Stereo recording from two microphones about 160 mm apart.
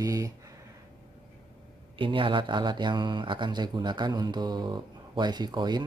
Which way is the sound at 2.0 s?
30° right (ahead or behind).